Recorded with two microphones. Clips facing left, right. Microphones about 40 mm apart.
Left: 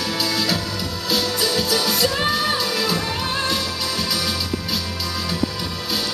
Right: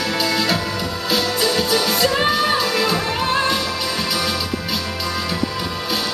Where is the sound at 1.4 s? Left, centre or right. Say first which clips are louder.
Right 2 dB; centre.